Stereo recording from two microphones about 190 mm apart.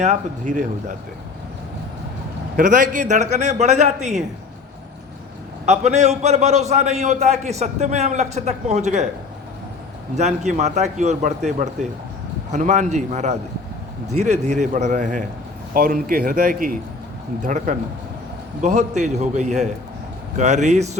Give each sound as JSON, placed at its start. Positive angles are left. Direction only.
{"t": 0.0, "sound": "a man's voice", "side_deg": -40}
{"t": 2.6, "sound": "a man's voice", "side_deg": -45}
{"t": 5.6, "sound": "a man's voice", "side_deg": -35}
{"t": 10.2, "sound": "a man's voice", "side_deg": -40}